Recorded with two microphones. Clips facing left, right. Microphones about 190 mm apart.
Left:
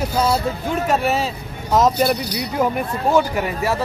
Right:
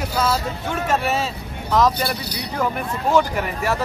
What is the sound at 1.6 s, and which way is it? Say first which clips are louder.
Speech: left 2 dB; 20° left (ahead or behind).